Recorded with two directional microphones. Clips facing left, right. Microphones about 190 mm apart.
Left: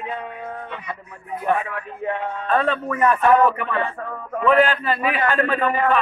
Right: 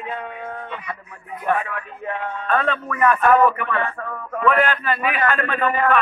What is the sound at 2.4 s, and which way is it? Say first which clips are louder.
A man's voice: left 1 dB; 30° left (ahead or behind).